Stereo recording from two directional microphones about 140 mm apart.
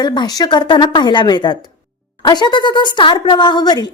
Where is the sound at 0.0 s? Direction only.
30° left (ahead or behind).